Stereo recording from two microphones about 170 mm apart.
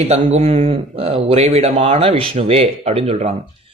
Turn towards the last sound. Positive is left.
turn(degrees=-40)  # may be behind; listen again after turning